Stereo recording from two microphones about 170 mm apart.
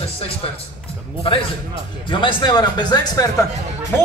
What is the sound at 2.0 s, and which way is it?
Speech, 25° left (ahead or behind).